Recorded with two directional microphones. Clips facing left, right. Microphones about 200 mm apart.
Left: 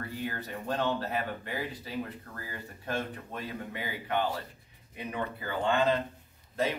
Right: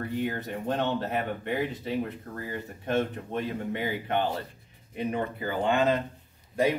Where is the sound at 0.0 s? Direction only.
20° right (ahead or behind).